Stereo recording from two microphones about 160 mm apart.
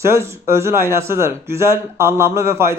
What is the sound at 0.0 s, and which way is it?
A man's voice, 15° right (ahead or behind).